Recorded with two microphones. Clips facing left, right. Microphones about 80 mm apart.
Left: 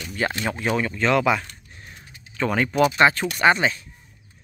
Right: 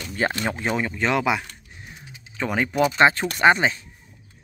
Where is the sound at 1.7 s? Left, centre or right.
Centre.